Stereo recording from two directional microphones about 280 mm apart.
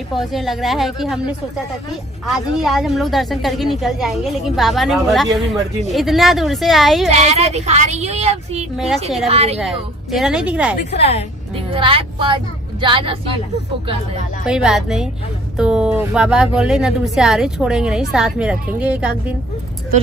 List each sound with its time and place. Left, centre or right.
0.1 s a woman's voice: centre
7.1 s speech: right
8.7 s a woman's voice: centre
9.3 s speech: right
9.6 s a woman's voice: centre
11.0 s a woman's voice: left
11.7 s speech: centre
14.4 s a woman's voice: centre